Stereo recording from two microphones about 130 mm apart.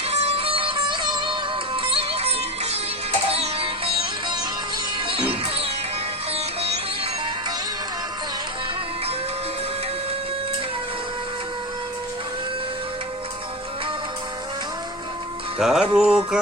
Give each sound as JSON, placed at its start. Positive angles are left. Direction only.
{"t": 0.0, "sound": "music", "side_deg": -50}
{"t": 6.3, "sound": "sitar", "side_deg": -50}
{"t": 15.5, "sound": "music", "side_deg": -5}